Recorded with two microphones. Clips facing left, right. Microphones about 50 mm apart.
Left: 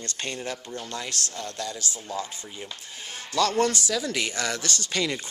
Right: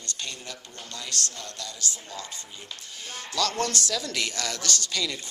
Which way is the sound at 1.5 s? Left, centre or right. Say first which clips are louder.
Left 3 dB; left.